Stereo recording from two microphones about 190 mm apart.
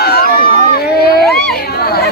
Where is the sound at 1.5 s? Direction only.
55° left (ahead or behind).